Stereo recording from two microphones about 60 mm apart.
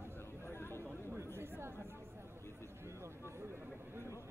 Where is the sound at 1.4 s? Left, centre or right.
Right.